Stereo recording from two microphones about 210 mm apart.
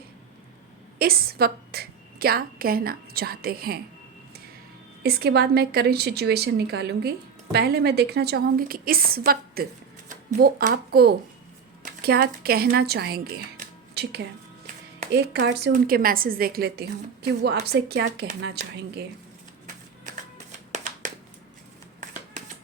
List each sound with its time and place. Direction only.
0.9 s a woman's voice: 45° right (ahead or behind)
5.0 s a woman's voice: 50° right (ahead or behind)